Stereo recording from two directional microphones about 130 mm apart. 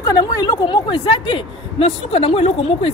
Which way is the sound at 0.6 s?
40° left (ahead or behind).